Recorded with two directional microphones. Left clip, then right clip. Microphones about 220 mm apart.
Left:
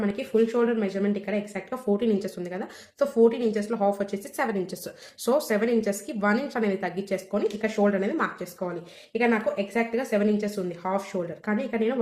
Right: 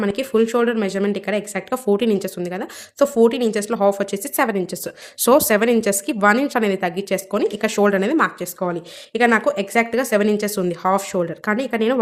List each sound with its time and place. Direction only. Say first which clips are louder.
0.0 s speech: right 6 dB; 50° right (ahead or behind)